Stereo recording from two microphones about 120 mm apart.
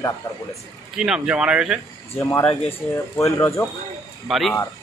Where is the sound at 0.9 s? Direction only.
5° right (ahead or behind).